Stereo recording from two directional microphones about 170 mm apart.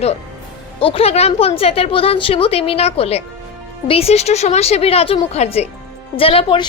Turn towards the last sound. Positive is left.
turn(degrees=30)  # may be behind; listen again after turning